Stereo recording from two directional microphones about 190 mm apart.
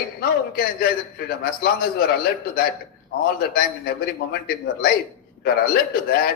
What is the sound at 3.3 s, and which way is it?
A man's voice, 50° left (ahead or behind).